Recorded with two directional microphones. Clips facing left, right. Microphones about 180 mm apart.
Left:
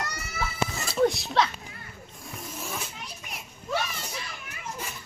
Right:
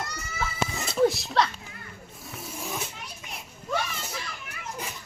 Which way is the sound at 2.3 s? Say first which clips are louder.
Right 1 dB; 10° right (ahead or behind).